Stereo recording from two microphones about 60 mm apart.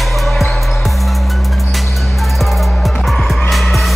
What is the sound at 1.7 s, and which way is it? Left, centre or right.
Music, centre.